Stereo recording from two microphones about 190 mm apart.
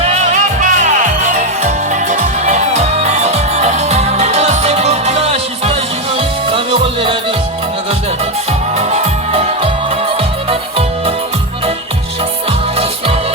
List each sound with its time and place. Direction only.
0.0 s music: 35° right (ahead or behind)
8.7 s music: 35° right (ahead or behind)
12.7 s music: 30° right (ahead or behind)